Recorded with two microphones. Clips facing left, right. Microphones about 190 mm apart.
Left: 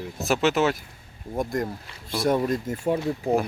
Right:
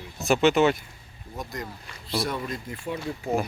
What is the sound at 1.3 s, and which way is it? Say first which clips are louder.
Speech: left 9 dB; 50° left (ahead or behind).